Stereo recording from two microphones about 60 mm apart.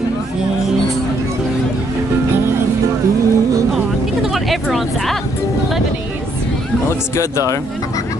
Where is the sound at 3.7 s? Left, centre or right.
Centre.